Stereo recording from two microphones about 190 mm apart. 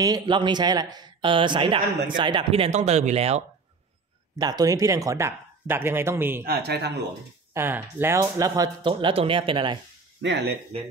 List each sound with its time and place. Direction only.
0.0 s speech: 25° right (ahead or behind)
4.4 s speech: 20° right (ahead or behind)
6.4 s speech: 55° right (ahead or behind)
7.5 s speech: 10° right (ahead or behind)
10.2 s speech: 65° right (ahead or behind)